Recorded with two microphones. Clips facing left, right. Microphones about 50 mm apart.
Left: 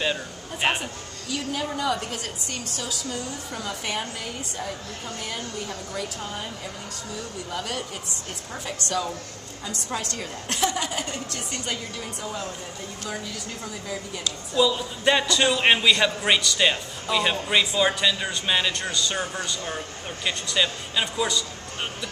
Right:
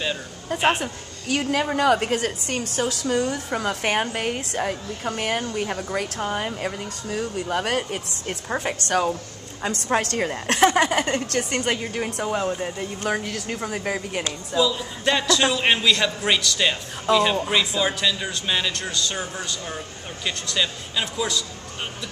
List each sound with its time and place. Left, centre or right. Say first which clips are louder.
1.3 s a woman's voice: right 6 dB; right
14.7 s speech: left 1 dB; centre